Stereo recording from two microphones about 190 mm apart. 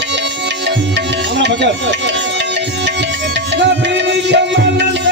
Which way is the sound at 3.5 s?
65° right (ahead or behind).